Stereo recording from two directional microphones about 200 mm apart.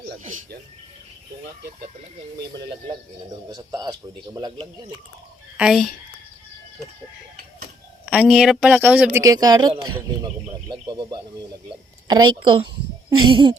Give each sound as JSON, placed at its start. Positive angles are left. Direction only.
{"t": 2.5, "sound": "speech", "side_deg": -25}
{"t": 5.5, "sound": "speech", "side_deg": 0}
{"t": 8.0, "sound": "a woman's voice", "side_deg": -5}